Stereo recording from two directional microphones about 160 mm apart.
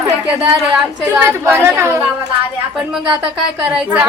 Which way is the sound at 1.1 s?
15° right (ahead or behind).